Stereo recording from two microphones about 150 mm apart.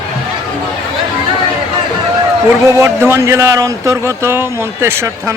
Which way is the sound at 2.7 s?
20° right (ahead or behind).